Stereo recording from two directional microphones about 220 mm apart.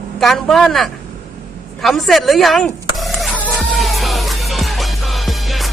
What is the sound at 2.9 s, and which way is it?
Music, centre (ahead or behind).